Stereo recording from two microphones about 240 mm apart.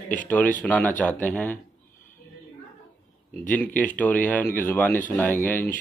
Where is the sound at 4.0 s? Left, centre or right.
Centre.